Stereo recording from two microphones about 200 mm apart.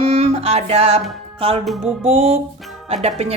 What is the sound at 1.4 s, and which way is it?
Music, 30° right (ahead or behind).